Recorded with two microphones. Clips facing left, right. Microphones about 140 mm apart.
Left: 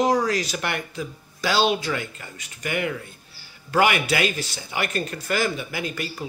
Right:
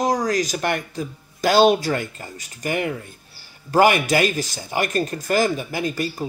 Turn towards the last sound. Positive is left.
turn(degrees=-40)  # may be behind; listen again after turning